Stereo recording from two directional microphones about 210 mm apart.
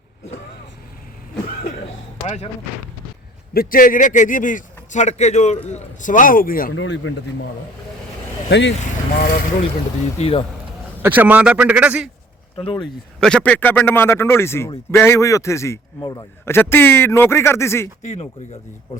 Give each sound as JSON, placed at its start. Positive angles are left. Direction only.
{"t": 2.2, "sound": "speech", "side_deg": 30}
{"t": 3.5, "sound": "speech", "side_deg": 45}
{"t": 6.7, "sound": "speech", "side_deg": 65}
{"t": 8.4, "sound": "speech", "side_deg": 55}
{"t": 10.2, "sound": "speech", "side_deg": 30}
{"t": 11.0, "sound": "speech", "side_deg": -10}
{"t": 12.5, "sound": "speech", "side_deg": 25}
{"t": 13.1, "sound": "a man's voice", "side_deg": 5}
{"t": 18.0, "sound": "speech", "side_deg": 35}